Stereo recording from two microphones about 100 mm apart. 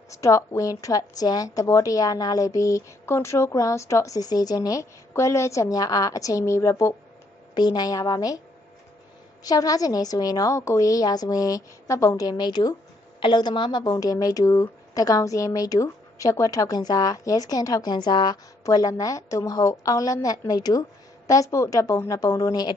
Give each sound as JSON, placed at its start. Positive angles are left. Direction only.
{"t": 0.1, "sound": "a woman's voice", "side_deg": 30}
{"t": 7.5, "sound": "a woman's voice", "side_deg": 45}
{"t": 9.4, "sound": "a woman's voice", "side_deg": 40}